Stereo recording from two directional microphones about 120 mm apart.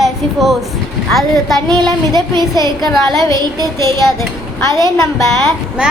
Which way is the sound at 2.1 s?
35° right (ahead or behind).